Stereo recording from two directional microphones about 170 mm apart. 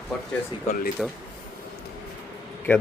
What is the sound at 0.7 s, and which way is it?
Speech, 55° left (ahead or behind).